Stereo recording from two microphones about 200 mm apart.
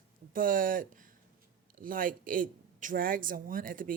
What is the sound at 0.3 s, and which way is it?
Speech, 45° right (ahead or behind).